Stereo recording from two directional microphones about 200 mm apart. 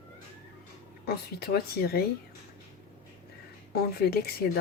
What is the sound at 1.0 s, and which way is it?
Speech, 50° left (ahead or behind).